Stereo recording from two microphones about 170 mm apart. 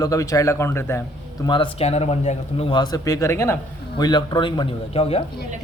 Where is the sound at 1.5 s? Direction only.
30° left (ahead or behind).